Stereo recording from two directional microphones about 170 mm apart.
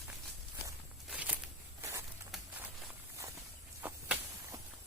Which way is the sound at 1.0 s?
10° right (ahead or behind).